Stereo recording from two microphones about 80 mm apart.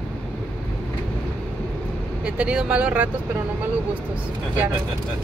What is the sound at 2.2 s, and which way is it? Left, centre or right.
Speech, centre.